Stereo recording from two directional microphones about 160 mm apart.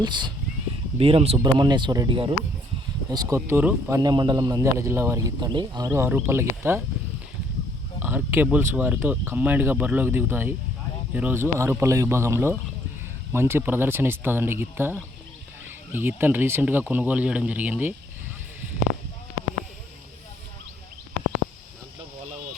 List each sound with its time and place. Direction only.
0.0 s speech: 30° right (ahead or behind)
1.4 s a man's voice: 25° right (ahead or behind)
7.9 s a man's voice: 10° right (ahead or behind)